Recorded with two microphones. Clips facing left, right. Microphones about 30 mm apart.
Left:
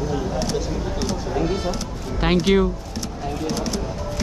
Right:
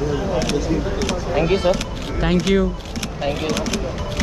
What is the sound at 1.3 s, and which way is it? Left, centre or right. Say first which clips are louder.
Speech: right 8 dB; right.